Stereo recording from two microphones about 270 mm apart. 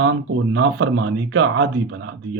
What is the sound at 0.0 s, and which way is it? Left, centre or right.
Speech, right.